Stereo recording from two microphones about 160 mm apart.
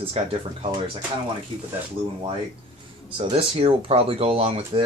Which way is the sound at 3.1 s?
35° right (ahead or behind).